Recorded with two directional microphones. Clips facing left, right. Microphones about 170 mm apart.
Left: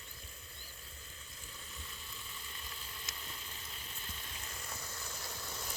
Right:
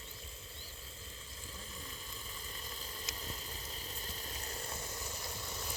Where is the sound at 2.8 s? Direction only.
35° right (ahead or behind).